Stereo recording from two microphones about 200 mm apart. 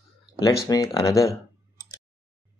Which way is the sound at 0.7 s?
20° left (ahead or behind).